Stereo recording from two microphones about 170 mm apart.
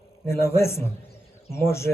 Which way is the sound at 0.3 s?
15° left (ahead or behind).